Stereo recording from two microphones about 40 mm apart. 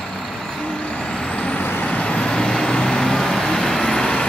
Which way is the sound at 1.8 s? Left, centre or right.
Left.